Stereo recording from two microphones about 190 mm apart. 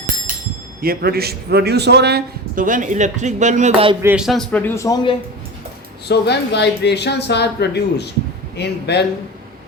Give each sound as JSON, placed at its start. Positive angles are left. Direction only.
{"t": 0.8, "sound": "a man's voice", "side_deg": -55}
{"t": 4.0, "sound": "a man's voice", "side_deg": -5}
{"t": 6.1, "sound": "speech", "side_deg": 60}